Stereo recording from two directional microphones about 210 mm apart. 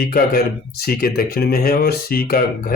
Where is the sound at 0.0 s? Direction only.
45° left (ahead or behind).